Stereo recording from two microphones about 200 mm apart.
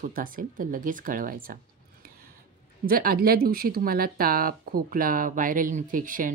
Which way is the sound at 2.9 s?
50° right (ahead or behind).